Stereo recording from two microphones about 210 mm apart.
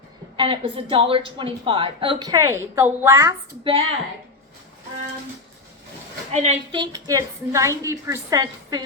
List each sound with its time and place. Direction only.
0.3 s a woman's voice: 25° right (ahead or behind)
3.6 s a woman's voice: 25° right (ahead or behind)
6.3 s a woman's voice: 30° right (ahead or behind); by 8.8 s 15° right (ahead or behind)